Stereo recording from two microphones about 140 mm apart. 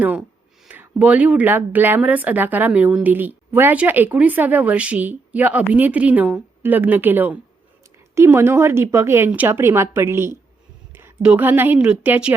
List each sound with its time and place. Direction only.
0.0 s a woman's voice: 10° right (ahead or behind)